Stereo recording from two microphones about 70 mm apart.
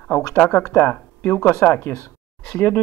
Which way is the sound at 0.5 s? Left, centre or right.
Left.